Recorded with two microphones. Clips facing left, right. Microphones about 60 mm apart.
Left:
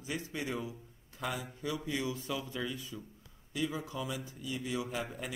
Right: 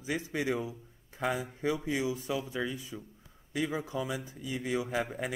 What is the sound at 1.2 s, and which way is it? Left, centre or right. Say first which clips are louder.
Speech: right 6 dB; right.